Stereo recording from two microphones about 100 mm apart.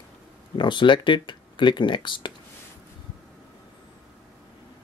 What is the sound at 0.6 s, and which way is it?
Speech, 50° left (ahead or behind).